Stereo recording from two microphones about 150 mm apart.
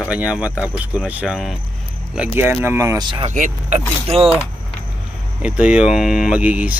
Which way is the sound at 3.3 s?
55° right (ahead or behind).